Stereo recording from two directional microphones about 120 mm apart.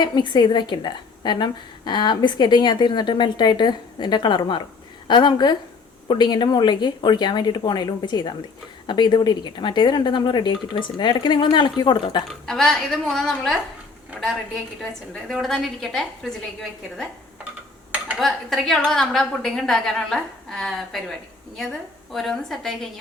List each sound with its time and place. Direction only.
0.0 s a woman's voice: 40° left (ahead or behind)
12.3 s a woman's voice: 5° left (ahead or behind)
14.8 s a woman's voice: centre (ahead or behind)
18.2 s a woman's voice: centre (ahead or behind)